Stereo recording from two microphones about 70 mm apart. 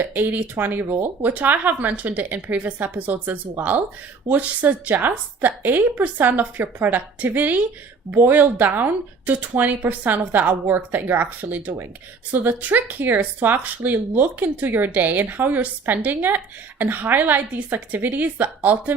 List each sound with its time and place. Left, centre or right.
0.0 s speech: right